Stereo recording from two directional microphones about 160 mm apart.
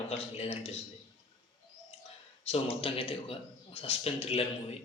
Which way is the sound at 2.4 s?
40° left (ahead or behind).